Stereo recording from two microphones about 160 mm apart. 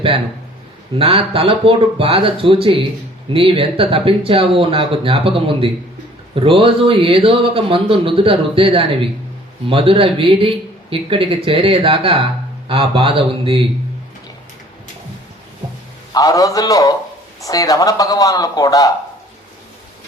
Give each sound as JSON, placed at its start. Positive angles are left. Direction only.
{"t": 0.9, "sound": "speech", "side_deg": -35}
{"t": 16.1, "sound": "a man's voice", "side_deg": 20}